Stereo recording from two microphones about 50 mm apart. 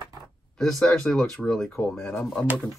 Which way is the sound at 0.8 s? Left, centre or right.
Centre.